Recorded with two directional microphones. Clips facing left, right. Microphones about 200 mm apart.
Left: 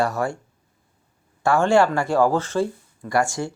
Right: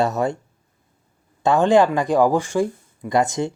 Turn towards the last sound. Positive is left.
turn(degrees=-20)  # may be behind; listen again after turning